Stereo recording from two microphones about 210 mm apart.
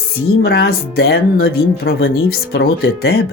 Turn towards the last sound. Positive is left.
turn(degrees=50)  # may be behind; listen again after turning